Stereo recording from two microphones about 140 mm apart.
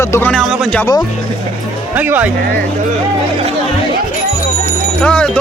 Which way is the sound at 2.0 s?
10° right (ahead or behind).